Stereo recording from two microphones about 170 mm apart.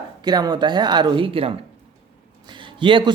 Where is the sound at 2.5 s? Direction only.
30° right (ahead or behind).